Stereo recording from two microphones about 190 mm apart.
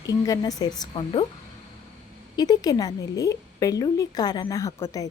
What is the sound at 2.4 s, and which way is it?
A woman's voice, 20° left (ahead or behind).